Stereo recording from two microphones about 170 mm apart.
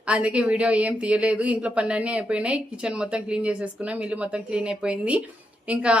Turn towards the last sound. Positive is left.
turn(degrees=-5)  # may be behind; listen again after turning